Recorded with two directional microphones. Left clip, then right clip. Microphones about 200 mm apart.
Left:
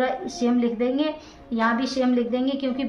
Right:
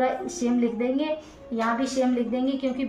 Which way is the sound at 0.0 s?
35° left (ahead or behind).